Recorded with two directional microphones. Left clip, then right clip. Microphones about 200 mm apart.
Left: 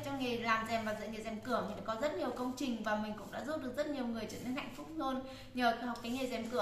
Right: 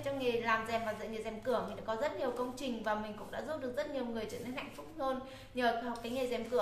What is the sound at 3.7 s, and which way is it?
A woman's voice, 5° right (ahead or behind).